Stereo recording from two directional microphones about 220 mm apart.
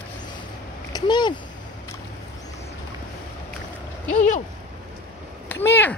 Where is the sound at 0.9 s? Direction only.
20° left (ahead or behind).